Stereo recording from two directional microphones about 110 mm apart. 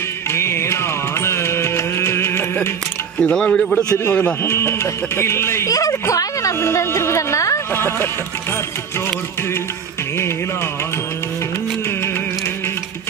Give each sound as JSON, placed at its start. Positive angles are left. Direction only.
{"t": 0.3, "sound": "music", "side_deg": 25}
{"t": 3.2, "sound": "speech", "side_deg": 10}